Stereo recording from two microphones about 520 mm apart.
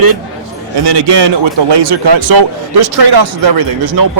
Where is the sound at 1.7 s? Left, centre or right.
Right.